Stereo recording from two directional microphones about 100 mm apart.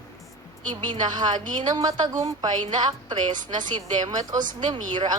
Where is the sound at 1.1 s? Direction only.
45° right (ahead or behind).